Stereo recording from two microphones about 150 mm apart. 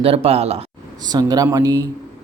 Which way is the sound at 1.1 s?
25° right (ahead or behind).